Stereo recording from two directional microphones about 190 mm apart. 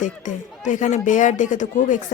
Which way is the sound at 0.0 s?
40° left (ahead or behind).